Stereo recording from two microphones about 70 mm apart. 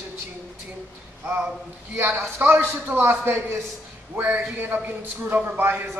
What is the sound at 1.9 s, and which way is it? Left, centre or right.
A man's voice, right.